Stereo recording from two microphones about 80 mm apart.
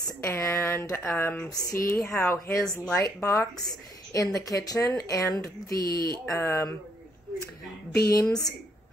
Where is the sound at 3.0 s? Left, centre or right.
Left.